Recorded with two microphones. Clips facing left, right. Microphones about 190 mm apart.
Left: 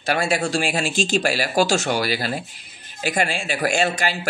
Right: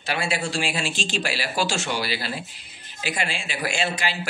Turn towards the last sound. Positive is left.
turn(degrees=45)  # may be behind; listen again after turning